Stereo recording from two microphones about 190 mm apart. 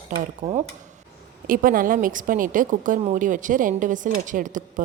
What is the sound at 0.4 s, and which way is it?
Speech, 35° right (ahead or behind).